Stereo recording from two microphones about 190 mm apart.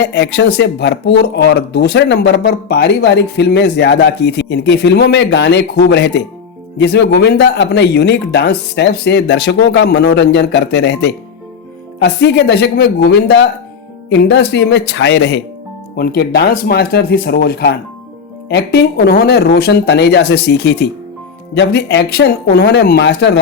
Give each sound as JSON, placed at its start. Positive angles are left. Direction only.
{"t": 0.0, "sound": "speech", "side_deg": 65}